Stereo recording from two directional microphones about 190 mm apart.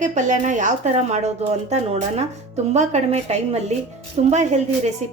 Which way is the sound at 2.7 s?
35° right (ahead or behind).